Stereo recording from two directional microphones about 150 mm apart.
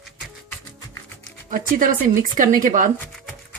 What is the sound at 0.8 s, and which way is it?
Music, 20° left (ahead or behind).